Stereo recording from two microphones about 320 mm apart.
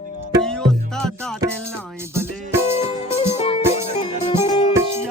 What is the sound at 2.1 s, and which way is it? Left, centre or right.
Music, centre.